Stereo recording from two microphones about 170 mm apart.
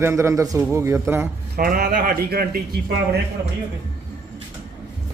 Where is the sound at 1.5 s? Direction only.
65° right (ahead or behind).